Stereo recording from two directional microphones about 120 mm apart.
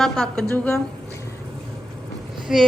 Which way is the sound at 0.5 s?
15° left (ahead or behind).